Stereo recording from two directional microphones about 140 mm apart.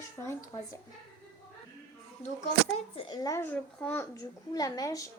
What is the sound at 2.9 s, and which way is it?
Speech, 30° left (ahead or behind).